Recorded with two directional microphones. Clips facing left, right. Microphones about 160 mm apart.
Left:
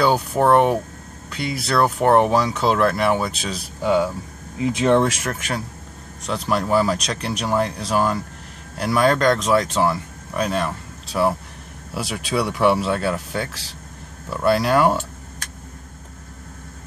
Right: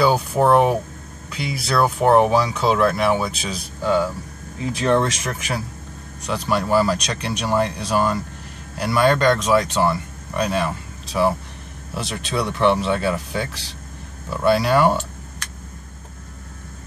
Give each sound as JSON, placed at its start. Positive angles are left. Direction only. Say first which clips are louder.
{"t": 0.0, "sound": "speech", "louder": "right 1 dB", "side_deg": 0}
{"t": 3.8, "sound": "speech", "louder": "left 1 dB", "side_deg": 15}
{"t": 5.0, "sound": "speech", "louder": "left 2 dB", "side_deg": 5}